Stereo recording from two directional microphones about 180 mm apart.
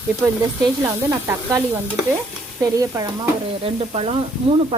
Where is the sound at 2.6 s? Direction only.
20° right (ahead or behind).